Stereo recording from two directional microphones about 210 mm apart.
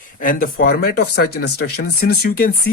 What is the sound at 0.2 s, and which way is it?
Speech, 40° left (ahead or behind).